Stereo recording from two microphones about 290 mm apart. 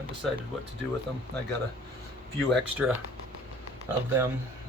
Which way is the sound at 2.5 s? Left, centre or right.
Centre.